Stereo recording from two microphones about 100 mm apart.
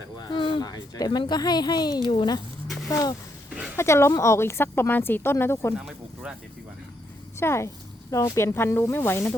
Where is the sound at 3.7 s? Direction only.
25° left (ahead or behind).